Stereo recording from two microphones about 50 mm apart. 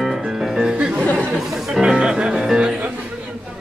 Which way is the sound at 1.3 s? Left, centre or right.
Centre.